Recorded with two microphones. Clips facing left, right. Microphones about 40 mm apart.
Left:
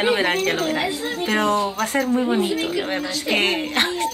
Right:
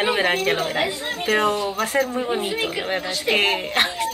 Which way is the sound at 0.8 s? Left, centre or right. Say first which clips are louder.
Even; right.